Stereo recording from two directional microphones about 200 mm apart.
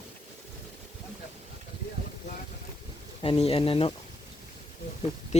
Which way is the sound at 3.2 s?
30° left (ahead or behind).